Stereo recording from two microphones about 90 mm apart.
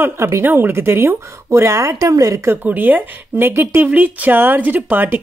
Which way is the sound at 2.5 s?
20° right (ahead or behind).